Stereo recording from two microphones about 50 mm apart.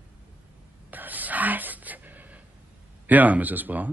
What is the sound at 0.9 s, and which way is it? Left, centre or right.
Gasp, right.